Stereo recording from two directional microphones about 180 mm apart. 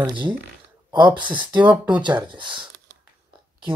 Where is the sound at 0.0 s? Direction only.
25° right (ahead or behind).